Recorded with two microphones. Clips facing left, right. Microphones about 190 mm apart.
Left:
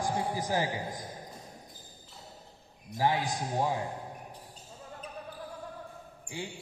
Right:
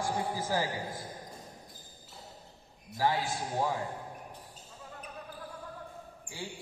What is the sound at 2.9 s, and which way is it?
Speech, 15° left (ahead or behind).